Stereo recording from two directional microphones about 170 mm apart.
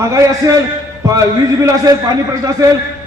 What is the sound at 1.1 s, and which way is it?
Speech, 20° right (ahead or behind).